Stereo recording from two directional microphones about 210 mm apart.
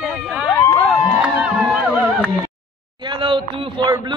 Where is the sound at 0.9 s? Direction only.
5° right (ahead or behind).